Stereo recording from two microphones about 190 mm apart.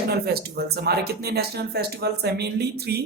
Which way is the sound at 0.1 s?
60° right (ahead or behind).